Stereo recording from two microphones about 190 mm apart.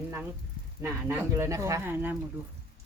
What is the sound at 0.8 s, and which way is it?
Speech, 10° right (ahead or behind).